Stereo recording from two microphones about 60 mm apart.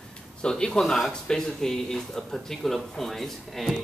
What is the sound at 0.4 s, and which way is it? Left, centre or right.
Speech, centre.